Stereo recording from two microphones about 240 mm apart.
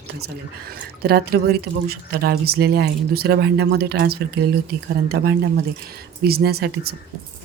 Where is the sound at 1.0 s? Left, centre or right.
Right.